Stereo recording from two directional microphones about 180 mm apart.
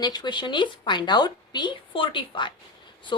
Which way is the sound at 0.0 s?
25° left (ahead or behind).